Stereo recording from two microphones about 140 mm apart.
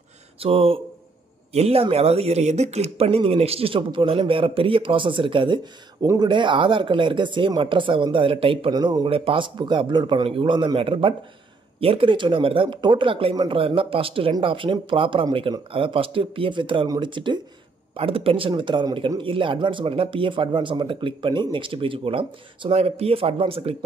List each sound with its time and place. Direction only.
0.4 s speech: 40° right (ahead or behind)
8.7 s speech: 30° right (ahead or behind)